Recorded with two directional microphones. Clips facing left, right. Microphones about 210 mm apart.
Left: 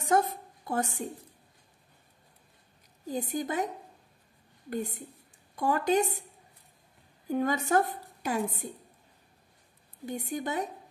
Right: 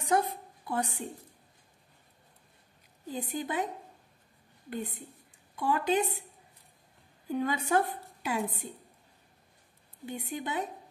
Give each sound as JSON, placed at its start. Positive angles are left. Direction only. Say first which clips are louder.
{"t": 0.0, "sound": "a sound", "louder": "left 2 dB", "side_deg": 45}
{"t": 3.1, "sound": "a woman's voice", "louder": "left 3 dB", "side_deg": 45}
{"t": 7.2, "sound": "a woman's voice", "louder": "left 2 dB", "side_deg": 45}
{"t": 10.0, "sound": "a woman's voice", "louder": "left 3 dB", "side_deg": 45}